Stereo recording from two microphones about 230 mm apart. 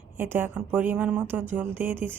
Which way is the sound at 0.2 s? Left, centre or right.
Centre.